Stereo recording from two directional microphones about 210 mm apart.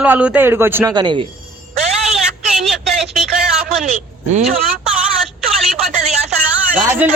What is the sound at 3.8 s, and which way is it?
Speech, 40° right (ahead or behind).